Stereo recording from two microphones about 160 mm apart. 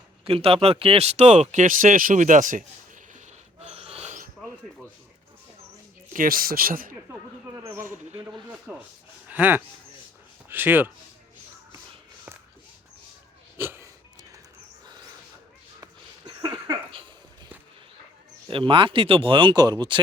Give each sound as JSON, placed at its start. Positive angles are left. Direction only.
{"t": 0.3, "sound": "speech", "side_deg": -35}
{"t": 3.6, "sound": "a sound", "side_deg": -40}
{"t": 6.1, "sound": "speech", "side_deg": -65}
{"t": 8.1, "sound": "speech", "side_deg": -30}
{"t": 8.5, "sound": "speech", "side_deg": -5}
{"t": 13.6, "sound": "wheeze", "side_deg": -15}
{"t": 15.8, "sound": "a sound", "side_deg": -25}
{"t": 18.4, "sound": "speech", "side_deg": -35}